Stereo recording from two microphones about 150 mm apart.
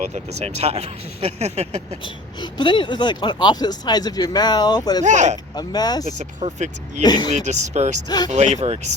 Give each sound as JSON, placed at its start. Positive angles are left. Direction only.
{"t": 0.0, "sound": "speech", "side_deg": -50}
{"t": 2.0, "sound": "speech", "side_deg": 30}
{"t": 5.0, "sound": "speech", "side_deg": -50}
{"t": 5.5, "sound": "speech", "side_deg": 25}
{"t": 6.1, "sound": "speech", "side_deg": -50}
{"t": 7.0, "sound": "speech", "side_deg": 25}
{"t": 7.3, "sound": "speech", "side_deg": -50}
{"t": 8.0, "sound": "speech", "side_deg": 25}
{"t": 8.3, "sound": "speech", "side_deg": -50}